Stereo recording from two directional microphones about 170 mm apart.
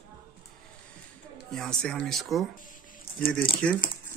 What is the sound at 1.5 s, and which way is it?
Speech, 5° left (ahead or behind).